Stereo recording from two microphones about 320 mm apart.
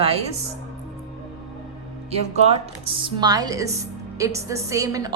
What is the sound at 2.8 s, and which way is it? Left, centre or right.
A woman's voice, centre.